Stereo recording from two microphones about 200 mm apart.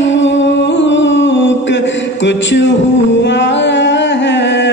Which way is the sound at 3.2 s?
60° left (ahead or behind).